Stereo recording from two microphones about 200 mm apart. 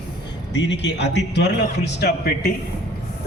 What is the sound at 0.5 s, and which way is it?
A man's voice, 60° left (ahead or behind).